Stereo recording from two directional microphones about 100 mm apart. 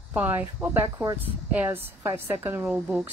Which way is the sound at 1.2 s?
20° right (ahead or behind).